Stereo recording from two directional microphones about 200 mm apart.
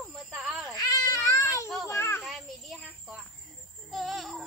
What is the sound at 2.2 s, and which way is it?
Cricket, centre (ahead or behind).